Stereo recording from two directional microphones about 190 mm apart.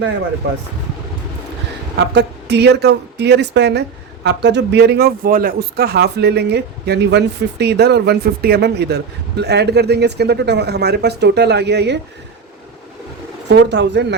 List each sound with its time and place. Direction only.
2.1 s a woman's voice: 65° right (ahead or behind)
13.5 s a woman's voice: 65° right (ahead or behind)